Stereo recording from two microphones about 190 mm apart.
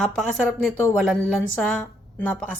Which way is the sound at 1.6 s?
5° left (ahead or behind).